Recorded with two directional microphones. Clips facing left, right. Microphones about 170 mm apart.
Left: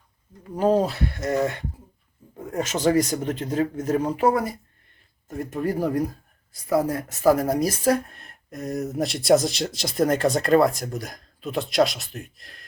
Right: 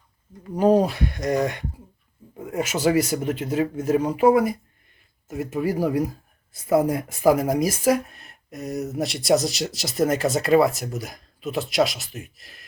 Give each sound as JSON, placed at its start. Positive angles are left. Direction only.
{"t": 0.5, "sound": "speech", "side_deg": -15}
{"t": 6.5, "sound": "speech", "side_deg": -20}